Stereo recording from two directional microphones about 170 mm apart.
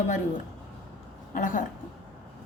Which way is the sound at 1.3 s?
50° left (ahead or behind).